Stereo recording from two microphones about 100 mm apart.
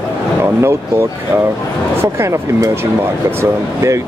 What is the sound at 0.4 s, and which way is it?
Speech, 25° right (ahead or behind).